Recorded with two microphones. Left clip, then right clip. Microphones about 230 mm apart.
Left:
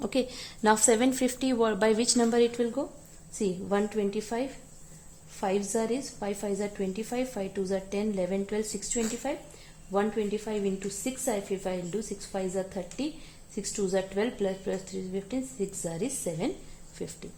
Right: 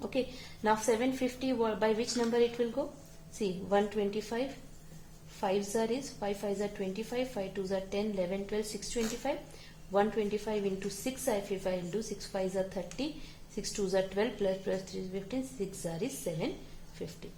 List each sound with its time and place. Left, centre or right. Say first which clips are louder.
0.0 s a woman's voice: left 5 dB; left